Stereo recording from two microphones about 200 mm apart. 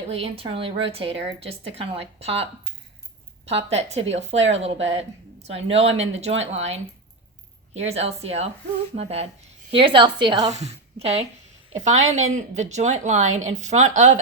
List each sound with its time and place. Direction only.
0.1 s a woman's voice: 30° right (ahead or behind)
10.5 s a woman's voice: 30° right (ahead or behind)